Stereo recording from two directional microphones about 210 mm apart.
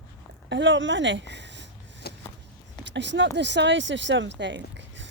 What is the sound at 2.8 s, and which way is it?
Speech, 60° right (ahead or behind).